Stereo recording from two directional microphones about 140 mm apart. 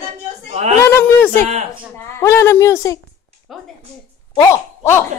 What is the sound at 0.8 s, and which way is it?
A woman's voice, 15° left (ahead or behind).